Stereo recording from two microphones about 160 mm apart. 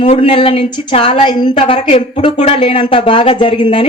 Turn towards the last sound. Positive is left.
turn(degrees=30)  # may be behind; listen again after turning